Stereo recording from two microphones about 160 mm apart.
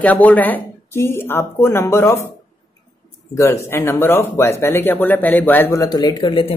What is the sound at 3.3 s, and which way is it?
Speech, 15° left (ahead or behind).